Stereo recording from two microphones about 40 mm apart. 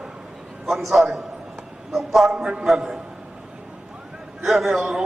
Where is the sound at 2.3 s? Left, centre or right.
Centre.